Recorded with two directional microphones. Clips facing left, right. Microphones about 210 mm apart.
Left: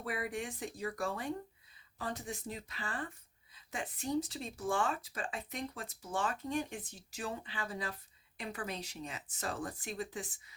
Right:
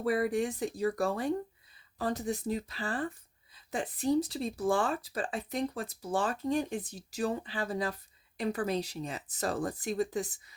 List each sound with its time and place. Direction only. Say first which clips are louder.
0.0 s speech: right 10 dB; 40° right (ahead or behind)